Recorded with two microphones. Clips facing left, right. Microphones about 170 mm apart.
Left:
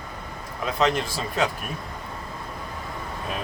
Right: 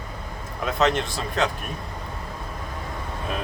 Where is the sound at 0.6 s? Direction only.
Centre (ahead or behind).